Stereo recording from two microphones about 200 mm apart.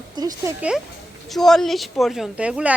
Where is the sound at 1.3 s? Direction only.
Centre (ahead or behind).